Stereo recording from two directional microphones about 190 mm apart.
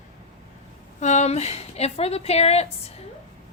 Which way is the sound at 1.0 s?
35° left (ahead or behind).